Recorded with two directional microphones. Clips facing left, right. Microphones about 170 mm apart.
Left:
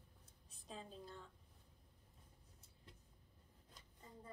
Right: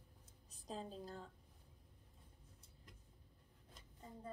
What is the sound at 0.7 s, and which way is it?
Speech, 40° right (ahead or behind).